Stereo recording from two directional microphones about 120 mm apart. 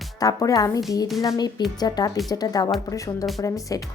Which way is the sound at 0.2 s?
30° left (ahead or behind).